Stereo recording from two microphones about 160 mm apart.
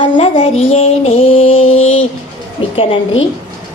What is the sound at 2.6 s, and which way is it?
Speech, 35° left (ahead or behind).